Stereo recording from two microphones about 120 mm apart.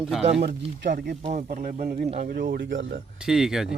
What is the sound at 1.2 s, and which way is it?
Speech, 70° right (ahead or behind).